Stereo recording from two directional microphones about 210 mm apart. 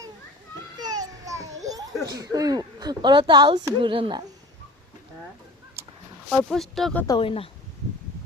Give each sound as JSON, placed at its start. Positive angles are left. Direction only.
{"t": 0.8, "sound": "baby cry", "side_deg": -20}
{"t": 2.0, "sound": "a woman's voice", "side_deg": -15}
{"t": 6.3, "sound": "speech", "side_deg": 0}
{"t": 7.1, "sound": "speech", "side_deg": 25}